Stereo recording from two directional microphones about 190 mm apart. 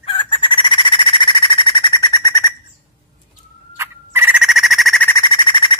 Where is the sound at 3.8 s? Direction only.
15° right (ahead or behind); by 5.2 s 5° left (ahead or behind).